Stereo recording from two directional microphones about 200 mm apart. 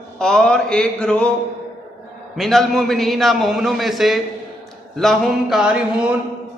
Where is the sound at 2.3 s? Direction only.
Centre (ahead or behind).